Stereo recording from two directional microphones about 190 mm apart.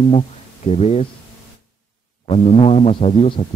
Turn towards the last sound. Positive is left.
turn(degrees=30)  # may be behind; listen again after turning